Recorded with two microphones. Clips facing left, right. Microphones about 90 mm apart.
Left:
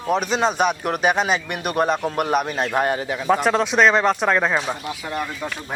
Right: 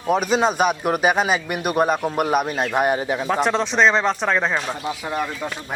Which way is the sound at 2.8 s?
15° right (ahead or behind).